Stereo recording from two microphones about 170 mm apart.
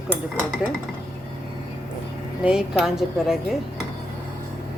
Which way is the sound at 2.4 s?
5° right (ahead or behind).